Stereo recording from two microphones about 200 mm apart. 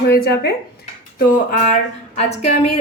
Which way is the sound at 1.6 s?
35° left (ahead or behind).